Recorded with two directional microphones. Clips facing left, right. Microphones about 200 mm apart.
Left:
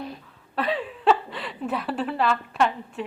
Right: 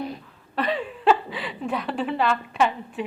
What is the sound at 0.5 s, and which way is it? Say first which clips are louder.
A woman's voice: right 1 dB; centre (ahead or behind).